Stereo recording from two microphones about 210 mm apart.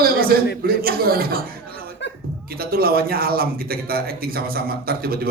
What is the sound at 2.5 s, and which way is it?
Speech, 45° right (ahead or behind).